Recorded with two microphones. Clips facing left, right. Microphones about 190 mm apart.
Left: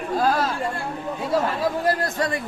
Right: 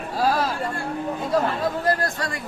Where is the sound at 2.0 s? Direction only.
20° left (ahead or behind).